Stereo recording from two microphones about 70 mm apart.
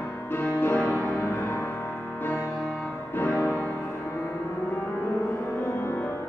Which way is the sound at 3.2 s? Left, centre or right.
Left.